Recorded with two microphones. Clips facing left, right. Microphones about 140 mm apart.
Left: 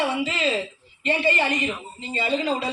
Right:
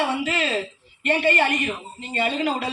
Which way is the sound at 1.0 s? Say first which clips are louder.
Right 2 dB; 60° right (ahead or behind).